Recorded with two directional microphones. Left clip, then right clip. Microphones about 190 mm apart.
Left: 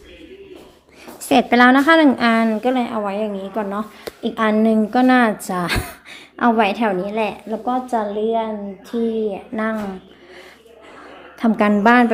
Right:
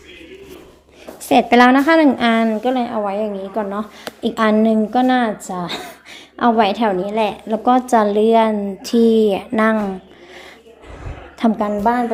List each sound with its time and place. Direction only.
1.3 s a woman's voice: 5° right (ahead or behind)
4.0 s a woman's voice: 15° right (ahead or behind); by 5.8 s 10° left (ahead or behind)
5.8 s a woman's voice: centre (ahead or behind)
7.4 s a woman's voice: 25° right (ahead or behind)
11.4 s a woman's voice: 10° right (ahead or behind)